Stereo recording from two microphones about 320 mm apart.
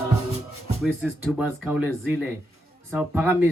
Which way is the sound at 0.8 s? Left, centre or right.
Centre.